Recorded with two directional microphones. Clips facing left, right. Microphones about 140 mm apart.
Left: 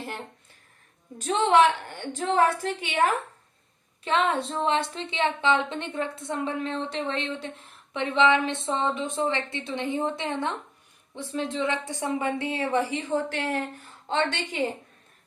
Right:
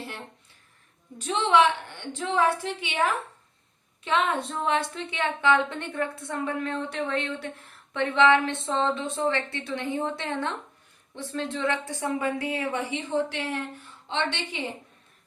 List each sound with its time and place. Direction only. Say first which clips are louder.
1.3 s a woman's voice: left 2 dB; 45° left (ahead or behind)
4.0 s a woman's voice: left 1 dB; 35° left (ahead or behind)
14.1 s a woman's voice: left 3 dB; 45° left (ahead or behind)